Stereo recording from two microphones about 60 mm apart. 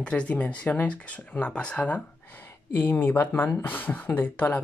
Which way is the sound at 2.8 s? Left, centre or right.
Left.